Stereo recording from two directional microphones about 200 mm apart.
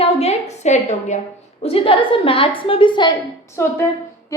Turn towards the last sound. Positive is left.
turn(degrees=15)  # may be behind; listen again after turning